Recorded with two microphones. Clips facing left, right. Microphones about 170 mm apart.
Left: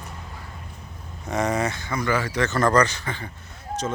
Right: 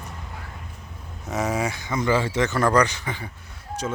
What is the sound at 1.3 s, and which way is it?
Speech, 5° right (ahead or behind).